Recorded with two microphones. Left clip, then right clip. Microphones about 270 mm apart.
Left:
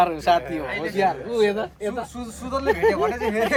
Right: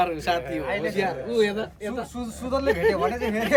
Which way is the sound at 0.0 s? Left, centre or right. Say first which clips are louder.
Left 5 dB; centre.